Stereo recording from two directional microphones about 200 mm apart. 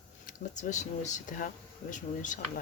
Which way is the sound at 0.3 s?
40° left (ahead or behind).